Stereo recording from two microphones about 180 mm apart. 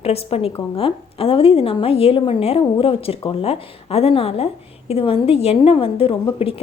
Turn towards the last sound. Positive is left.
turn(degrees=30)  # may be behind; listen again after turning